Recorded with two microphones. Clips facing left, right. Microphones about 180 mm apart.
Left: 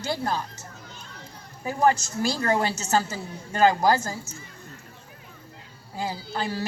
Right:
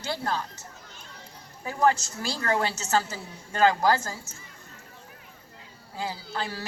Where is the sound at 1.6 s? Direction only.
15° left (ahead or behind).